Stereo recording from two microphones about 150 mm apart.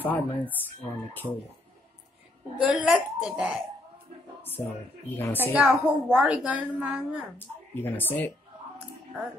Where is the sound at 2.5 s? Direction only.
5° right (ahead or behind).